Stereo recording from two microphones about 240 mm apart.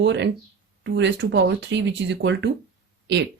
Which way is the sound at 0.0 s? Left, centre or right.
Right.